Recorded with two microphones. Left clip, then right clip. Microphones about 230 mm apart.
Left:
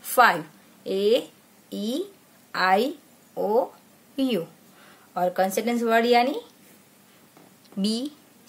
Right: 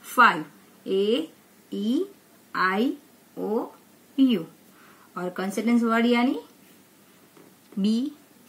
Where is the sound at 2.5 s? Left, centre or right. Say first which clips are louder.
Left 3 dB; left.